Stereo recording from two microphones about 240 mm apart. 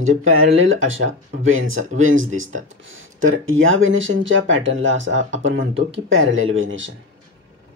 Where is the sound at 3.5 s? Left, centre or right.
Right.